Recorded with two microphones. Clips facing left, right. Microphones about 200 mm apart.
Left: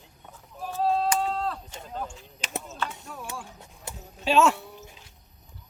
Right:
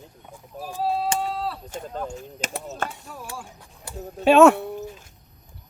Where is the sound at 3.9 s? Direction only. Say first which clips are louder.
Right 6 dB; 20° left (ahead or behind).